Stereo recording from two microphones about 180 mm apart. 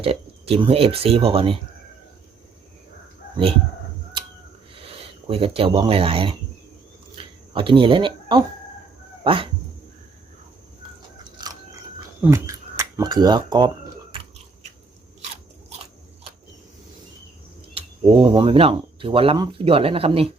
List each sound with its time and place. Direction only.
0.0 s speech: 35° right (ahead or behind)
4.2 s a sound: 25° right (ahead or behind)
4.7 s speech: 30° right (ahead or behind)
7.2 s a sound: 30° right (ahead or behind)
9.2 s speech: 30° right (ahead or behind)
11.2 s chewing: 25° right (ahead or behind)
12.2 s speech: 15° right (ahead or behind)
17.7 s speech: 25° right (ahead or behind)